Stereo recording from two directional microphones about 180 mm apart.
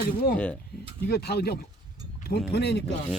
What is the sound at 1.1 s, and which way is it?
Speech, 65° left (ahead or behind).